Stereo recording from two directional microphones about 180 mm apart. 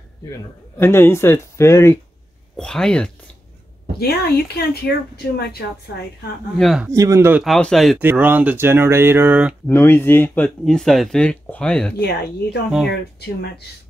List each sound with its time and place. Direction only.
0.7 s speech: 10° left (ahead or behind)
2.5 s speech: 5° left (ahead or behind)
4.0 s speech: 60° left (ahead or behind)
6.6 s speech: centre (ahead or behind)
6.9 s speech: 15° right (ahead or behind)
7.4 s speech: centre (ahead or behind)
8.0 s speech: 10° right (ahead or behind)
9.7 s speech: 10° left (ahead or behind)
12.0 s speech: 65° left (ahead or behind)